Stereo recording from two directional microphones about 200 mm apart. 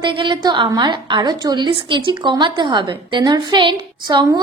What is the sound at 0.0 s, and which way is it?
A woman's voice, 20° right (ahead or behind).